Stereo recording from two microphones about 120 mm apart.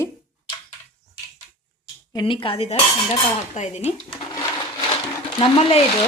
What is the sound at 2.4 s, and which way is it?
Cutlery, 55° left (ahead or behind).